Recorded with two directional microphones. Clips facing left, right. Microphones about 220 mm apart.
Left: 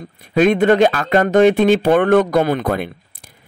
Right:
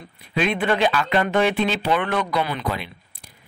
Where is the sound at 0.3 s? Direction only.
45° left (ahead or behind).